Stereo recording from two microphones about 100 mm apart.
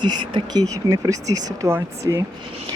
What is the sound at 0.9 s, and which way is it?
Speech, 35° right (ahead or behind).